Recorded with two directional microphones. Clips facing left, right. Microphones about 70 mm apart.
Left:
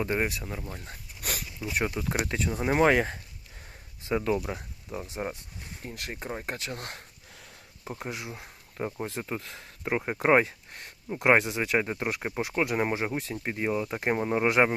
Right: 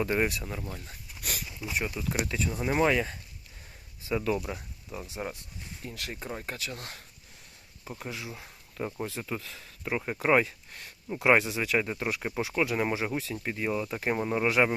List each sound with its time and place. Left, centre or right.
0.0 s speech: centre
0.9 s a sound: left
1.7 s speech: left
4.1 s speech: left
6.6 s speech: left
7.9 s speech: left
9.5 s a sound: left
9.9 s speech: left
11.1 s speech: centre